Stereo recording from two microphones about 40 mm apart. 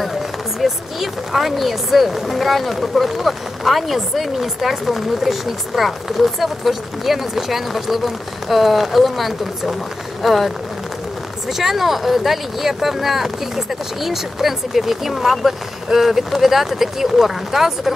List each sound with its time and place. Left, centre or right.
1.3 s speech: centre
11.5 s speech: centre